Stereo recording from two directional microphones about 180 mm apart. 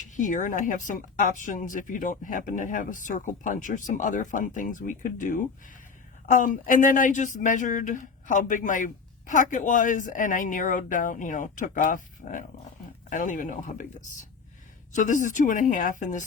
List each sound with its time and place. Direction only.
0.2 s speech: 45° left (ahead or behind)
14.9 s speech: 45° left (ahead or behind)